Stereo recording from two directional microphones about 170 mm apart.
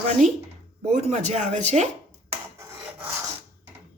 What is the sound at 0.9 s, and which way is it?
Speech, 45° right (ahead or behind).